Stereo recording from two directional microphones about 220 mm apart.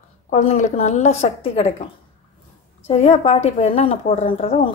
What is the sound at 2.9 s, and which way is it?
A woman's voice, 30° left (ahead or behind).